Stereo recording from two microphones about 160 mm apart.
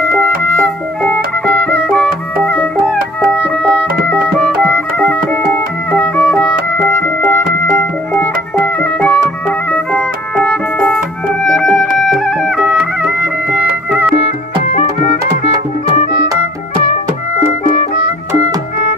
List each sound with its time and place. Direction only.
0.1 s music: 5° left (ahead or behind)
2.6 s music: 5° right (ahead or behind)
4.2 s music: 5° left (ahead or behind)
14.8 s music: 45° left (ahead or behind)